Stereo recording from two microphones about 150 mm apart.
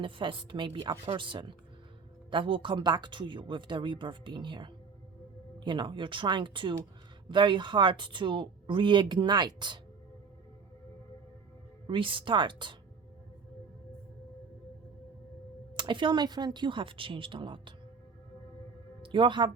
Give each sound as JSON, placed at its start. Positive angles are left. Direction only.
{"t": 0.0, "sound": "speech", "side_deg": -35}
{"t": 11.9, "sound": "speech", "side_deg": -35}
{"t": 15.7, "sound": "speech", "side_deg": -30}
{"t": 19.0, "sound": "speech", "side_deg": -35}